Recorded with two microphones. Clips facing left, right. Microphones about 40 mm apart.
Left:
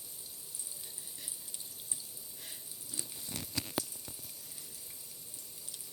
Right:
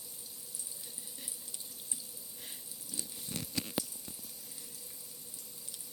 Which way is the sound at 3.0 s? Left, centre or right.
Left.